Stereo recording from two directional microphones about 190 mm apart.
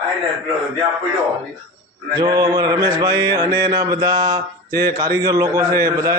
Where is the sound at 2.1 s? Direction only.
20° right (ahead or behind).